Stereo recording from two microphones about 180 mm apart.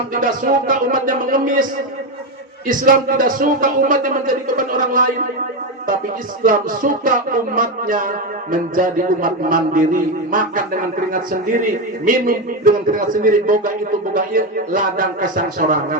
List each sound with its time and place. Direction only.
0.1 s a man's voice: 50° right (ahead or behind)
2.6 s a man's voice: 50° right (ahead or behind)
6.4 s a man's voice: 50° right (ahead or behind)